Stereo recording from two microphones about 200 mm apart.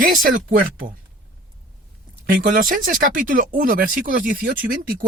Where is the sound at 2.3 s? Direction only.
45° right (ahead or behind).